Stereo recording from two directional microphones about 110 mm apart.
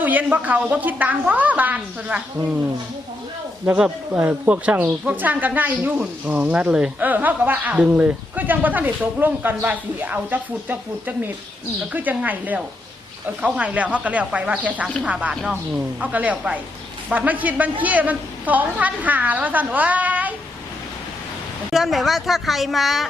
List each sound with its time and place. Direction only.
0.0 s speech: 15° right (ahead or behind)
3.7 s speech: 15° right (ahead or behind)
21.7 s speech: centre (ahead or behind)